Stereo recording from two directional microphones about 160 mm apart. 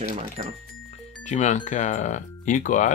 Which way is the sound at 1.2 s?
45° left (ahead or behind).